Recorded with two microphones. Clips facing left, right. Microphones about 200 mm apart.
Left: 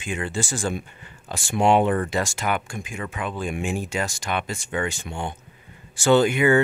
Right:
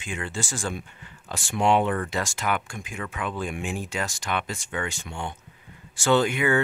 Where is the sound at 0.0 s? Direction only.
15° left (ahead or behind).